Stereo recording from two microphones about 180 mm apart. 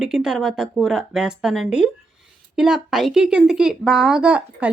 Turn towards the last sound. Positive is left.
turn(degrees=-5)  # may be behind; listen again after turning